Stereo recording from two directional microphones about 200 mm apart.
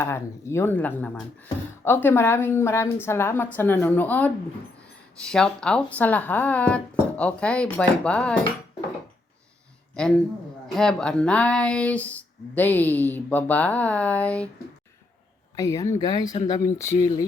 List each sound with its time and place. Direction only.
0.0 s a woman's voice: 15° left (ahead or behind)
10.0 s a woman's voice: 5° left (ahead or behind)
15.5 s a woman's voice: 15° left (ahead or behind)